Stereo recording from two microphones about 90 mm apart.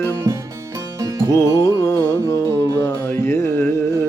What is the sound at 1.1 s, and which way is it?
Music, 40° left (ahead or behind).